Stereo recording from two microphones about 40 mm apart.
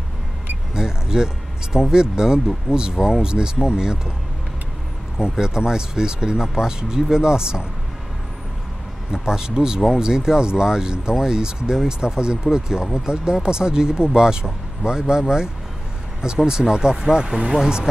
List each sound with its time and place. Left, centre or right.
0.7 s speech: centre
5.2 s speech: centre
9.1 s speech: centre